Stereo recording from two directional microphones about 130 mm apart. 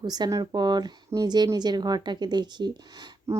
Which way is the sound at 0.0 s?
30° right (ahead or behind).